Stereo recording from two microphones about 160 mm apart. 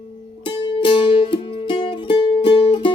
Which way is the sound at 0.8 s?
30° left (ahead or behind).